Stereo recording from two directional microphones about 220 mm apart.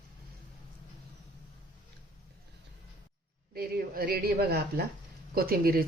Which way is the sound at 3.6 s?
45° right (ahead or behind).